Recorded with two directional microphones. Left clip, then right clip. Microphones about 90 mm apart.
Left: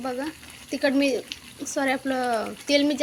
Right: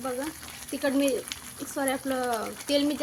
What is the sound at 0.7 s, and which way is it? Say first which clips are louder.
Speech: left 4 dB; 35° left (ahead or behind).